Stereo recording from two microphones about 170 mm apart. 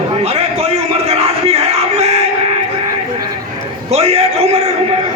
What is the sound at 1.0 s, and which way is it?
Battle cry, 35° right (ahead or behind).